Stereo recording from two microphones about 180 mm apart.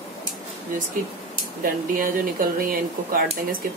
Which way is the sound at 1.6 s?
50° right (ahead or behind).